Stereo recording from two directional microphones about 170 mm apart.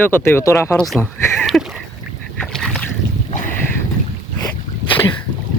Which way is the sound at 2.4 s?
5° left (ahead or behind).